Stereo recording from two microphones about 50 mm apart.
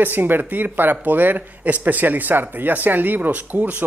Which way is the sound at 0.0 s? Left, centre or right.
Right.